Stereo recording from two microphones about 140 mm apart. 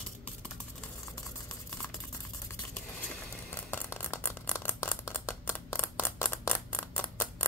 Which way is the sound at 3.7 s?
15° left (ahead or behind).